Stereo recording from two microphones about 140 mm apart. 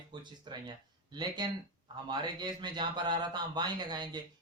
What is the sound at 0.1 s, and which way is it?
Speech, 35° right (ahead or behind).